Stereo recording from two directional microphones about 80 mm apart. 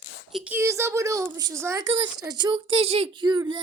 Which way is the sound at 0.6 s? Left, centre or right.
Right.